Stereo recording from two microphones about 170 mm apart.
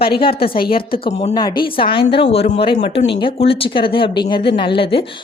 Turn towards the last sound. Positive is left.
turn(degrees=30)  # may be behind; listen again after turning